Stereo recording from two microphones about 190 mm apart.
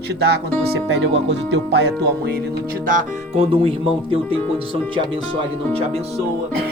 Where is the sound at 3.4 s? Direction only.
30° right (ahead or behind).